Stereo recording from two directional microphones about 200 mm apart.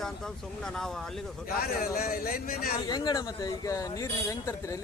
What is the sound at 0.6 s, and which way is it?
Speech, centre (ahead or behind).